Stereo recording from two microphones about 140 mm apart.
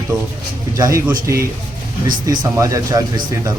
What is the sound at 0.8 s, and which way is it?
Speech, 25° right (ahead or behind).